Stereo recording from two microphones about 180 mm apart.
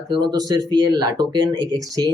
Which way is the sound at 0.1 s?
20° right (ahead or behind).